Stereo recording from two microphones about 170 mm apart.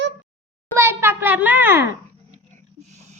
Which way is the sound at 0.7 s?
15° right (ahead or behind).